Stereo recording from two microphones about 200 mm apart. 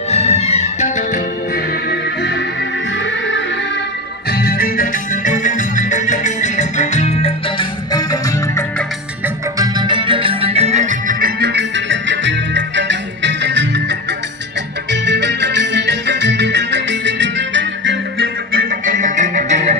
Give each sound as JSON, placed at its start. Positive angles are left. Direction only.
{"t": 0.1, "sound": "music", "side_deg": 30}
{"t": 3.1, "sound": "music", "side_deg": 70}
{"t": 4.3, "sound": "music", "side_deg": 50}
{"t": 7.9, "sound": "music", "side_deg": 15}
{"t": 9.6, "sound": "music", "side_deg": -20}
{"t": 18.5, "sound": "music", "side_deg": -45}